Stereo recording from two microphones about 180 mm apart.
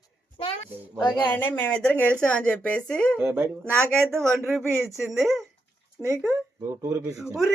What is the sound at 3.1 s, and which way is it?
Speech, 10° right (ahead or behind).